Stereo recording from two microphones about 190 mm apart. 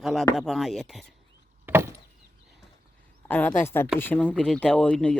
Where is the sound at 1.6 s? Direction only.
10° right (ahead or behind).